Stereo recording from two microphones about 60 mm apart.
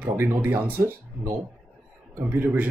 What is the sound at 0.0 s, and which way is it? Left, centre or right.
Speech, right.